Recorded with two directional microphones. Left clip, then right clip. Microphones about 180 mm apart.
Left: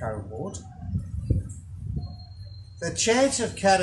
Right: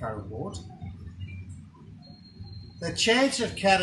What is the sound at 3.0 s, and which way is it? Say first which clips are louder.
Speech: left 1 dB; 15° left (ahead or behind).